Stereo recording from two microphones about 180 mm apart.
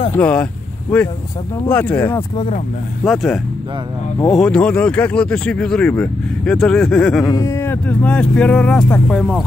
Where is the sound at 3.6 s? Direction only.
25° right (ahead or behind).